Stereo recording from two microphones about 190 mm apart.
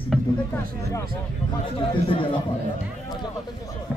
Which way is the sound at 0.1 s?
5° right (ahead or behind).